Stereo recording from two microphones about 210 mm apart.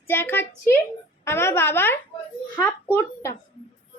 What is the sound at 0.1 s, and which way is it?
A woman's voice, 10° left (ahead or behind).